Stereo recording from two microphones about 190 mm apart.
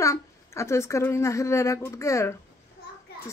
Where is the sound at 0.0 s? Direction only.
15° left (ahead or behind).